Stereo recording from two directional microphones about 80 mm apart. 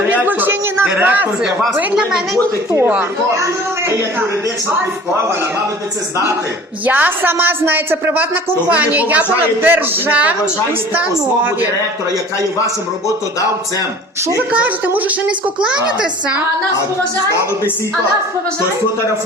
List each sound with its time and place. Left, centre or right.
0.1 s a sound: right
1.5 s a woman's voice: centre
3.3 s a man's voice: right
6.8 s a man's voice: right
14.5 s a woman's voice: centre